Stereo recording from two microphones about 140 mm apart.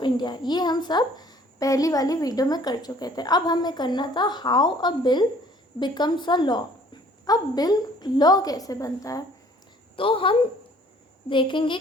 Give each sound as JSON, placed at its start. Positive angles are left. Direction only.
{"t": 0.0, "sound": "a woman's voice", "side_deg": 30}
{"t": 9.9, "sound": "a woman's voice", "side_deg": 40}